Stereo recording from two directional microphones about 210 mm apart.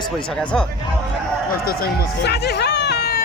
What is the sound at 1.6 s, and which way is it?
Speech, 45° left (ahead or behind).